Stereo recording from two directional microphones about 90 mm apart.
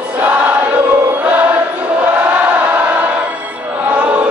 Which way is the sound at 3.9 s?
15° right (ahead or behind).